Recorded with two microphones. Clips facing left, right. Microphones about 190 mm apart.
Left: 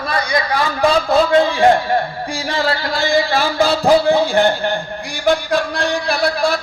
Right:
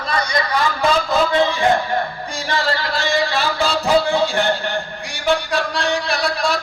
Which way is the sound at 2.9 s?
50° left (ahead or behind).